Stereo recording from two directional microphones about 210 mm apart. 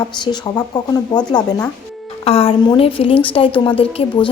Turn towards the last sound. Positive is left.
turn(degrees=25)  # may be behind; listen again after turning